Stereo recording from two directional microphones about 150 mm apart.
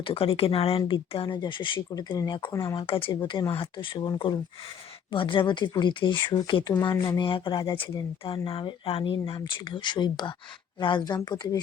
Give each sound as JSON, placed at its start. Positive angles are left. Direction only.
{"t": 0.0, "sound": "speech", "side_deg": 40}